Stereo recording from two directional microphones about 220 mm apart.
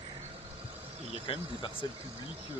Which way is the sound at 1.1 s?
25° left (ahead or behind).